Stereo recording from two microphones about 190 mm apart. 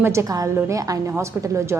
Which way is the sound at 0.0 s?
15° right (ahead or behind).